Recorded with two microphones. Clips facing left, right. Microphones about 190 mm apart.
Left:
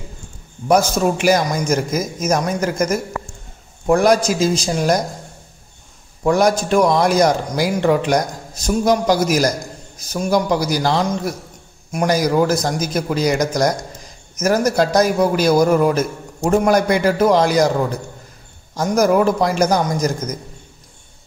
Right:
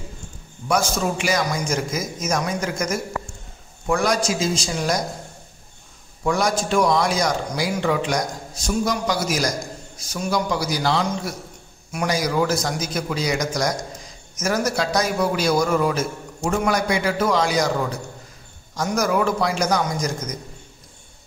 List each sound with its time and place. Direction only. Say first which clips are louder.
0.8 s a man's voice: left 7 dB; 55° left (ahead or behind)
6.2 s a man's voice: left 6 dB; 45° left (ahead or behind)
8.6 s a man's voice: left 7 dB; 45° left (ahead or behind)
18.8 s a man's voice: left 6 dB; 45° left (ahead or behind)